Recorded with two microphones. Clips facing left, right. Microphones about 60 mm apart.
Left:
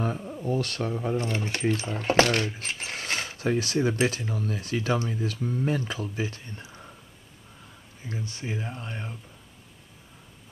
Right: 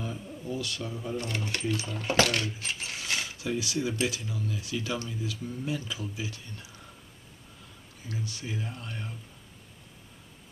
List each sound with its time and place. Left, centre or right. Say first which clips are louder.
0.0 s speech: left 7 dB; left
1.1 s speech: left 4 dB; left
8.1 s speech: left 3 dB; left